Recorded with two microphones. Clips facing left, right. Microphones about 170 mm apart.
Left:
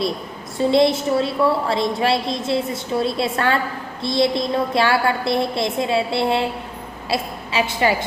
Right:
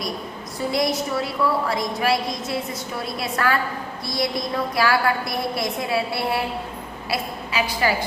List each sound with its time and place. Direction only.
0.7 s a woman's voice: 25° left (ahead or behind)